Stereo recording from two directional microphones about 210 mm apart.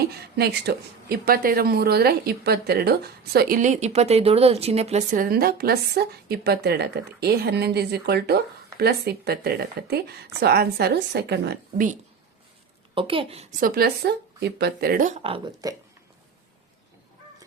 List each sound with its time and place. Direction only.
0.0 s speech: 50° right (ahead or behind)
12.9 s a woman's voice: 25° right (ahead or behind)
15.6 s speech: 20° right (ahead or behind)